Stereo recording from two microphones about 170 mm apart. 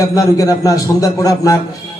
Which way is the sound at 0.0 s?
20° left (ahead or behind).